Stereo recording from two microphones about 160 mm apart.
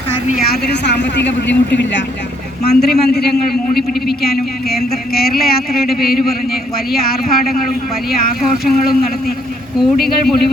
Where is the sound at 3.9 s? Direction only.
80° left.